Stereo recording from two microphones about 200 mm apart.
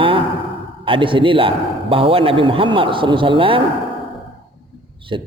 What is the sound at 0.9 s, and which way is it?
A man's voice, 25° right (ahead or behind).